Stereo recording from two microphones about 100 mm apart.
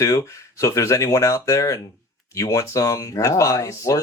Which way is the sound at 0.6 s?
30° left (ahead or behind).